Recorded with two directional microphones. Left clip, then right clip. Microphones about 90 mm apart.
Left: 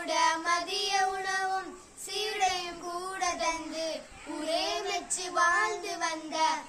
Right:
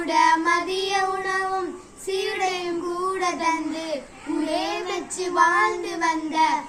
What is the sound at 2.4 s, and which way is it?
Child singing, 40° left (ahead or behind).